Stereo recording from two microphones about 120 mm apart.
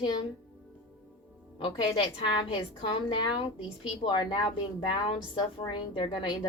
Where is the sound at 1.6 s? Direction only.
40° left (ahead or behind).